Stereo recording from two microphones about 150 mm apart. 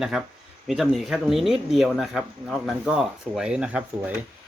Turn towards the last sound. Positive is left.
turn(degrees=-10)  # may be behind; listen again after turning